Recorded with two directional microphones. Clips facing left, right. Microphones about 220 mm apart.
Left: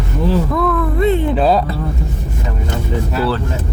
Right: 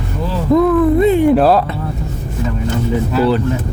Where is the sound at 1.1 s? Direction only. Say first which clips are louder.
Right 4 dB; 10° right (ahead or behind).